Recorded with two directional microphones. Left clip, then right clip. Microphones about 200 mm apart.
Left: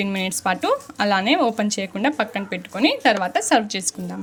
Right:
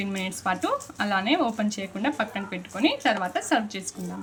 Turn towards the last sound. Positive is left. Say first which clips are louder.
# left 7 dB
turn(degrees=35)  # may be behind; listen again after turning